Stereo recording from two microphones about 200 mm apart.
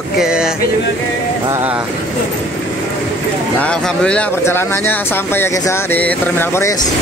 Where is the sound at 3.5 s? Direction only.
5° left (ahead or behind).